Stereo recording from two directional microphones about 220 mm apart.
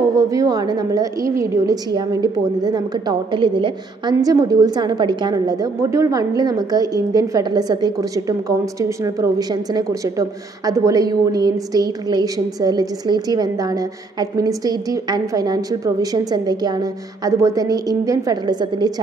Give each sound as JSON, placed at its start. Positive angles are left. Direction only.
{"t": 0.1, "sound": "a woman's voice", "side_deg": -15}